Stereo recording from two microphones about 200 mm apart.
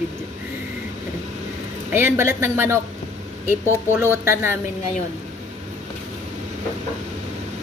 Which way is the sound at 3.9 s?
10° right (ahead or behind).